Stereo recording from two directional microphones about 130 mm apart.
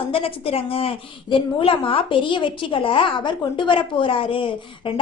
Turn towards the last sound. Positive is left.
turn(degrees=40)  # may be behind; listen again after turning